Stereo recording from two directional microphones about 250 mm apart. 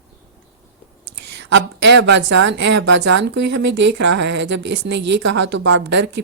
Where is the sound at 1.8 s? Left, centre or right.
Right.